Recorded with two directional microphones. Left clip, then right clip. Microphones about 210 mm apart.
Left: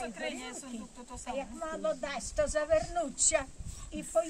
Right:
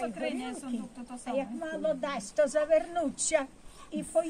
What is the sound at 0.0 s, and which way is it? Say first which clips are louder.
Speech: right 4 dB; 20° left (ahead or behind).